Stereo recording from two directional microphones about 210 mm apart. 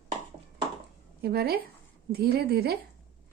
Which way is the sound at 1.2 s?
50° right (ahead or behind).